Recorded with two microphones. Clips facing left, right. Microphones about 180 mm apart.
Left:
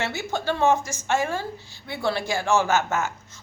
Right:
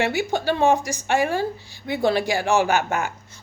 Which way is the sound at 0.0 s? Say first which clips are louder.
Right 5 dB; 15° right (ahead or behind).